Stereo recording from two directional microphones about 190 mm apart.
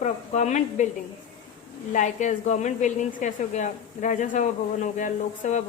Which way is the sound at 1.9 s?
40° left (ahead or behind).